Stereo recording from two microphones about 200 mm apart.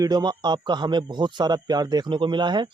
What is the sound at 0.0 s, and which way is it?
Speech, 20° right (ahead or behind).